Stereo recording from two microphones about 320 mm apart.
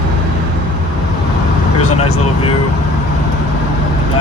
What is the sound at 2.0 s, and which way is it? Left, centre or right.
Speech, centre.